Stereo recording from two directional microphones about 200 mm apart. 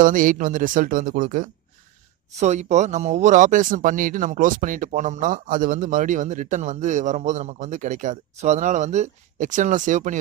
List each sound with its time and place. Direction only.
0.0 s speech: 40° right (ahead or behind)